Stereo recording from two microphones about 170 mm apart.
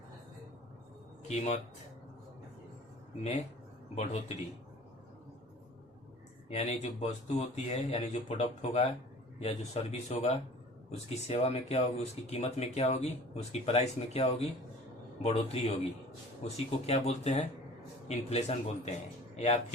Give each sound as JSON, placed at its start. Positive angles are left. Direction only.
{"t": 1.3, "sound": "speech", "side_deg": 40}
{"t": 3.9, "sound": "speech", "side_deg": 40}
{"t": 6.5, "sound": "speech", "side_deg": 40}